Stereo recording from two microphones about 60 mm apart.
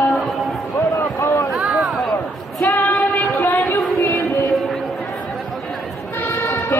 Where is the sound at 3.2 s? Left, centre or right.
Left.